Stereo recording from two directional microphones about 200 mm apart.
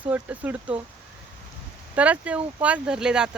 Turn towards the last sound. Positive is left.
turn(degrees=-5)  # may be behind; listen again after turning